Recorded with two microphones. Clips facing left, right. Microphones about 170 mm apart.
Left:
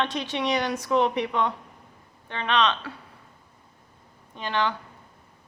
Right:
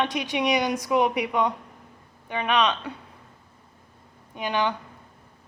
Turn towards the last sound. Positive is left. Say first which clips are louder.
# right 1 dB
turn(degrees=-15)  # may be behind; listen again after turning